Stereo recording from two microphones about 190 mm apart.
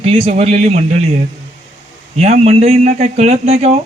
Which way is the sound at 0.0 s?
30° right (ahead or behind).